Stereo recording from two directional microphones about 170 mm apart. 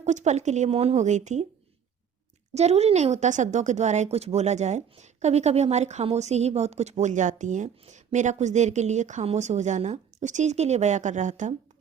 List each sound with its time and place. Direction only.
0.0 s speech: 45° right (ahead or behind)
2.6 s speech: 40° right (ahead or behind)